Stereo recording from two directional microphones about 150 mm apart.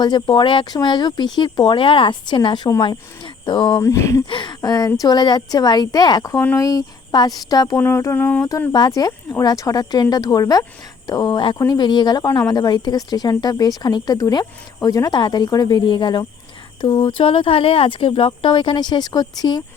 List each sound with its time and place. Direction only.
0.0 s speech: 30° left (ahead or behind)
3.8 s speech: 20° left (ahead or behind)
4.3 s speech: 30° left (ahead or behind)